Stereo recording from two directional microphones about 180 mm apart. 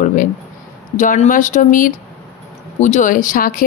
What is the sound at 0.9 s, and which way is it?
Speech, 45° left (ahead or behind).